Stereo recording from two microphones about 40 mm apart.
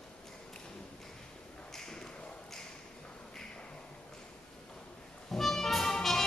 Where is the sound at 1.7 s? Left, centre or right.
Centre.